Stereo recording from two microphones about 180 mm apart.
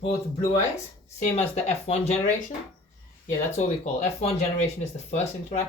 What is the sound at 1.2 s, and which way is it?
Speech, 40° left (ahead or behind).